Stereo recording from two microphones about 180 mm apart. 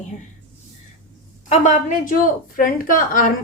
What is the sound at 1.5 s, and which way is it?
A woman's voice, 40° left (ahead or behind).